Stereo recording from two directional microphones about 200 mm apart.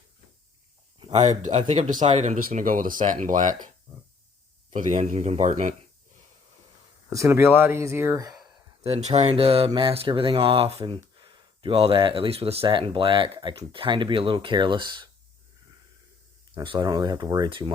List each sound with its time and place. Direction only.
0.9 s a sound: 30° right (ahead or behind)
1.5 s speech: 30° right (ahead or behind)
4.7 s speech: 40° right (ahead or behind)
7.1 s speech: 15° right (ahead or behind)
8.8 s speech: 30° right (ahead or behind)
16.6 s speech: 20° right (ahead or behind)